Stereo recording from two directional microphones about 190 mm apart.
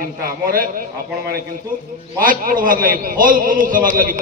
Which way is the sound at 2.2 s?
45° right (ahead or behind).